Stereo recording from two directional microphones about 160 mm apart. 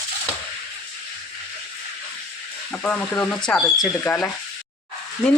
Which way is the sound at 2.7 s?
10° left (ahead or behind).